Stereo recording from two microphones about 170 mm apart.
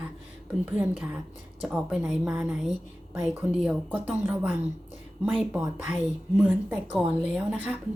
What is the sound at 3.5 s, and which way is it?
A woman's voice, 5° right (ahead or behind).